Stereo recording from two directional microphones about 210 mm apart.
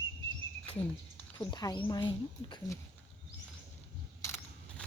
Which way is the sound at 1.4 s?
20° left (ahead or behind).